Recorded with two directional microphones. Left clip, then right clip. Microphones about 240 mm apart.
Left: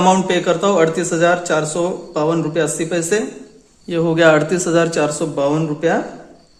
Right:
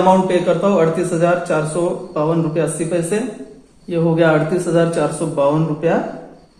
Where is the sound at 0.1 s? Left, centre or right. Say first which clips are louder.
Right 1 dB; left.